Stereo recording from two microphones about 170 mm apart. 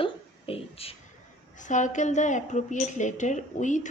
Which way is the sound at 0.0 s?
35° left (ahead or behind).